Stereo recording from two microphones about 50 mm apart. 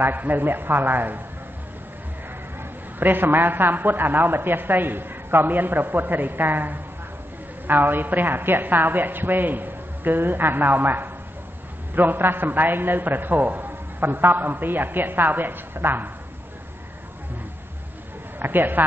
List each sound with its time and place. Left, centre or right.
0.0 s a woman's voice: right
3.0 s a woman's voice: right
18.4 s a man's voice: right